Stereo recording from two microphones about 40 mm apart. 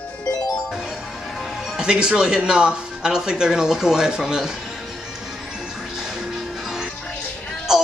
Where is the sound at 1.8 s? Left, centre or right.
Centre.